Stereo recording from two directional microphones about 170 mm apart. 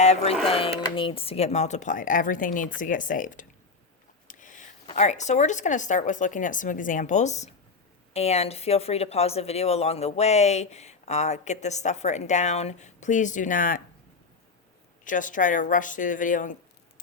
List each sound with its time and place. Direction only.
0.0 s speech: 40° left (ahead or behind)
4.3 s a sound: 50° left (ahead or behind)
4.9 s speech: 45° left (ahead or behind)
15.0 s speech: 50° left (ahead or behind)